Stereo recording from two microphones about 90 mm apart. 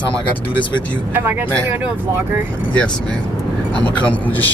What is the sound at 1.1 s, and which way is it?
Speech, 20° right (ahead or behind).